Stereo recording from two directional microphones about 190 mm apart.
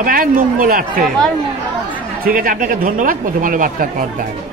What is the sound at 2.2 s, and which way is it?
Speech, 45° right (ahead or behind).